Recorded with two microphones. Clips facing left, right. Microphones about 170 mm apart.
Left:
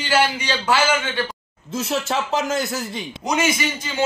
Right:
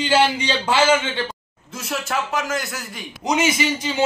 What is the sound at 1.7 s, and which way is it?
Speech, 25° left (ahead or behind).